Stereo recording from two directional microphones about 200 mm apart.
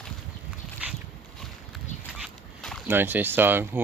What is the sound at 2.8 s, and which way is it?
Speech, 10° right (ahead or behind).